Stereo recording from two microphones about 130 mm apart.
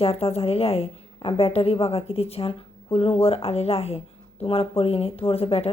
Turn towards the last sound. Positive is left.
turn(degrees=50)  # may be behind; listen again after turning